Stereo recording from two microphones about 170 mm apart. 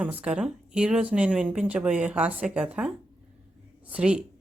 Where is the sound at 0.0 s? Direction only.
10° right (ahead or behind).